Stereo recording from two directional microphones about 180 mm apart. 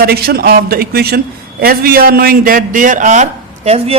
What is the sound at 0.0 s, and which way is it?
A man's voice, 60° right (ahead or behind).